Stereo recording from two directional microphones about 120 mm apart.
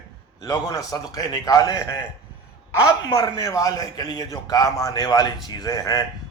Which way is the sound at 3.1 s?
30° left (ahead or behind).